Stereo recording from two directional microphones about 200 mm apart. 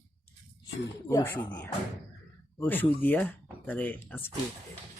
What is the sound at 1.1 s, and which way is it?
Speech, 15° left (ahead or behind).